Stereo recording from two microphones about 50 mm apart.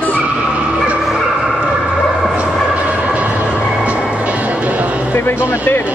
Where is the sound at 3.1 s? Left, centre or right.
Right.